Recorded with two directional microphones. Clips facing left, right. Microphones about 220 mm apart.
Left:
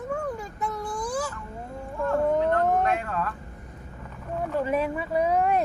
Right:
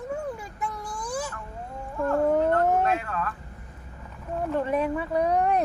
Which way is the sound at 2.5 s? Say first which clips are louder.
Right 1 dB; 5° right (ahead or behind).